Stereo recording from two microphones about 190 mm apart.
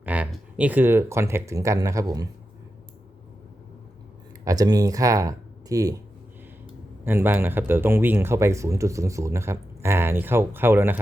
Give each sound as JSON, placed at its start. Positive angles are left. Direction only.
{"t": 0.0, "sound": "speech", "side_deg": -5}
{"t": 4.4, "sound": "speech", "side_deg": -20}
{"t": 7.0, "sound": "speech", "side_deg": -10}